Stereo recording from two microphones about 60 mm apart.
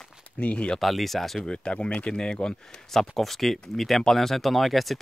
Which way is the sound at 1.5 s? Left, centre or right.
Centre.